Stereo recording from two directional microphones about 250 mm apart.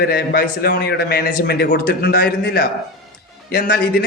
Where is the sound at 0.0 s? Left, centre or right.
Left.